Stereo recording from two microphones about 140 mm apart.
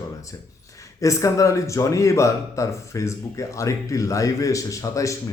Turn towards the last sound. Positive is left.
turn(degrees=25)  # may be behind; listen again after turning